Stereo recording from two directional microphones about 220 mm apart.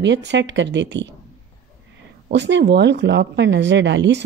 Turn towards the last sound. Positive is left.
turn(degrees=-55)  # may be behind; listen again after turning